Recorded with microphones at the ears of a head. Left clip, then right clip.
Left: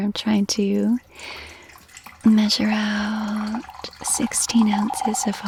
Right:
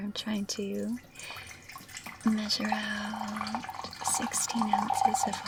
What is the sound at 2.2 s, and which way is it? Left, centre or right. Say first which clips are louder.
Speech: left 11 dB; left.